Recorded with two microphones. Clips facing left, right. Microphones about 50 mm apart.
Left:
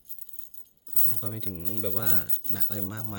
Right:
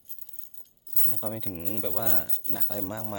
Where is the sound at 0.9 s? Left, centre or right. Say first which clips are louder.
Right 4 dB; right; by 2.8 s centre.